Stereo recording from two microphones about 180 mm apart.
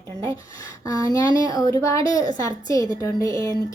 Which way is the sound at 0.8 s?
20° left (ahead or behind).